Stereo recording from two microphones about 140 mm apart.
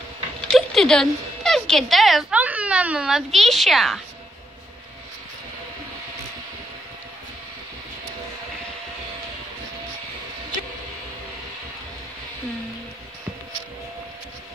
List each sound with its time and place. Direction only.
0.5 s a woman's voice: 5° left (ahead or behind)